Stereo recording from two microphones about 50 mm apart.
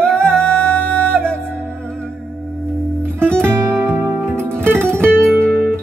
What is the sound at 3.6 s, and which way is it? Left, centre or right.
Music, centre.